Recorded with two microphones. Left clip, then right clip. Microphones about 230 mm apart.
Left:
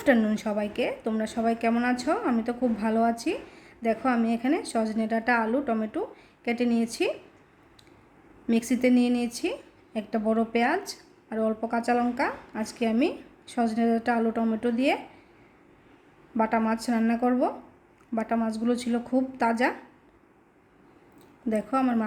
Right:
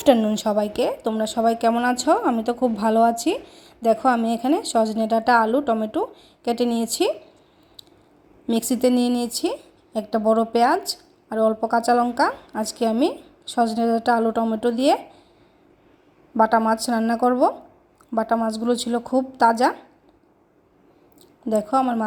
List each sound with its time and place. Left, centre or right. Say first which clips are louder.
0.0 s a woman's voice: right 6 dB; centre
8.4 s a woman's voice: right 4 dB; right
16.4 s a woman's voice: right 8 dB; right
21.7 s speech: right 5 dB; centre